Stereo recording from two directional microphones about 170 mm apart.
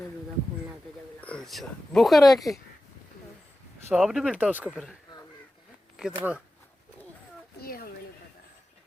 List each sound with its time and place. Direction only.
1.2 s speech: 5° left (ahead or behind)
3.8 s speech: 5° right (ahead or behind)
6.0 s speech: 10° right (ahead or behind)
7.6 s a sound: 60° left (ahead or behind)